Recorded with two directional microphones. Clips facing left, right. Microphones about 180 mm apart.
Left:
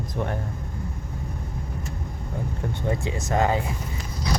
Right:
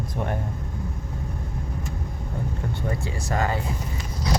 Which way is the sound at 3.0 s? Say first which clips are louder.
Left 4 dB; 20° left (ahead or behind).